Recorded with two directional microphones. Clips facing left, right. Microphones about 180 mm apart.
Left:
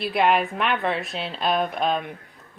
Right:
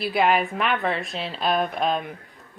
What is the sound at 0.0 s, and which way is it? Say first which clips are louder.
Speech: even; centre (ahead or behind).